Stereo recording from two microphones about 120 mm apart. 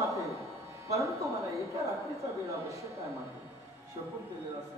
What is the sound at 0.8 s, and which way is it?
Speech, 25° right (ahead or behind).